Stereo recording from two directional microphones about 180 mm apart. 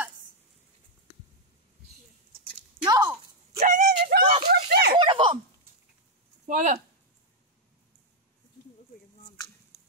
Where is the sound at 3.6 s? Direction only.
50° right (ahead or behind).